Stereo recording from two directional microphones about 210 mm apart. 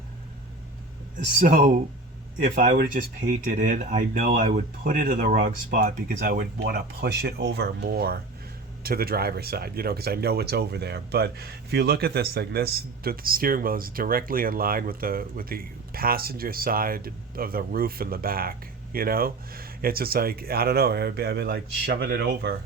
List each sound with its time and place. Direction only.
1.4 s speech: 40° right (ahead or behind)